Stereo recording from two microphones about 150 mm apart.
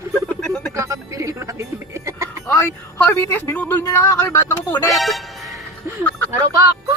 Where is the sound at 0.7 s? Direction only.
20° right (ahead or behind).